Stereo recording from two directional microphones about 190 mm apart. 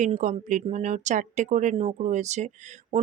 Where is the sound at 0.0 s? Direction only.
40° right (ahead or behind).